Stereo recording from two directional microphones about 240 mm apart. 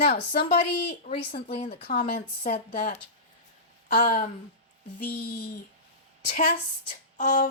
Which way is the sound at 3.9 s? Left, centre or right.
Left.